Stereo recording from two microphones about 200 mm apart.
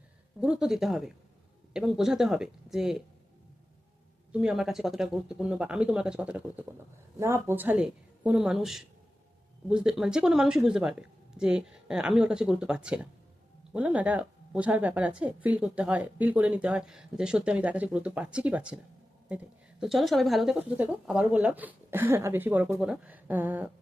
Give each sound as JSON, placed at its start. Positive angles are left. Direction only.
{"t": 0.3, "sound": "speech", "side_deg": -5}
{"t": 4.3, "sound": "speech", "side_deg": -5}